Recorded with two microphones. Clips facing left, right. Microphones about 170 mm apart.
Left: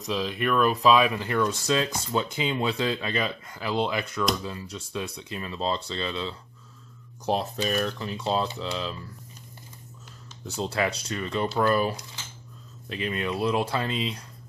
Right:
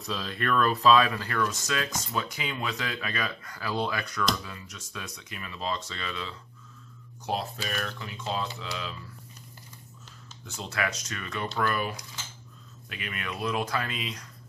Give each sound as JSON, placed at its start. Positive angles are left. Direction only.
{"t": 0.0, "sound": "speech", "side_deg": 15}
{"t": 7.7, "sound": "speech", "side_deg": 35}
{"t": 10.4, "sound": "speech", "side_deg": 35}